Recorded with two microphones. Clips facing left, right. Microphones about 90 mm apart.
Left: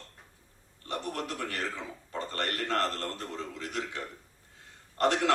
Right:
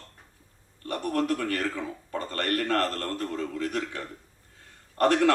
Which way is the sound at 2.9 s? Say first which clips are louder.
Right 5 dB; 20° left (ahead or behind).